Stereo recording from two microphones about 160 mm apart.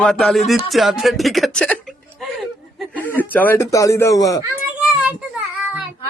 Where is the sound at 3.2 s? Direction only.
10° left (ahead or behind).